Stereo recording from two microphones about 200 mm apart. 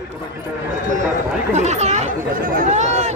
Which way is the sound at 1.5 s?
35° right (ahead or behind).